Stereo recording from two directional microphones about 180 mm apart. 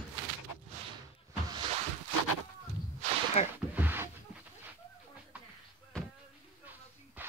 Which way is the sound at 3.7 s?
10° right (ahead or behind).